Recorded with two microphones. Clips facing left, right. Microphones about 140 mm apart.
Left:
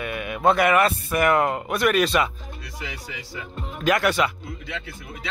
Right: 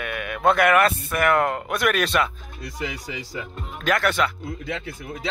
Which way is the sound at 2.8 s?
40° right (ahead or behind).